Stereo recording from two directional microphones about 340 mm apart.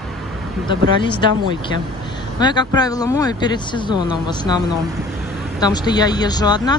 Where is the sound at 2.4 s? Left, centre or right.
Centre.